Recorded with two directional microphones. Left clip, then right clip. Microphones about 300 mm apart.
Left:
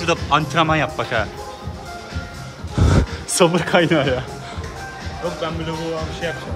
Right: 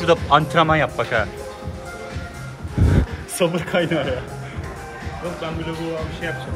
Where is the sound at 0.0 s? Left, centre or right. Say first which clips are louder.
Right 2 dB; centre.